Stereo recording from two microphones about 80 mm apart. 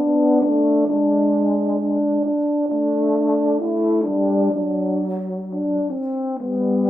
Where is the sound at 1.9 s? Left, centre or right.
Right.